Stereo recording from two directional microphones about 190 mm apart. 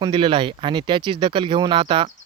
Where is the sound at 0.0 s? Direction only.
25° right (ahead or behind).